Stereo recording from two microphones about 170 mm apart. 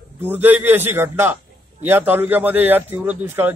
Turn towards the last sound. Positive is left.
turn(degrees=-10)  # may be behind; listen again after turning